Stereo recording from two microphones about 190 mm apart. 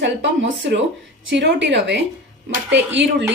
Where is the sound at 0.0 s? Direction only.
70° right (ahead or behind).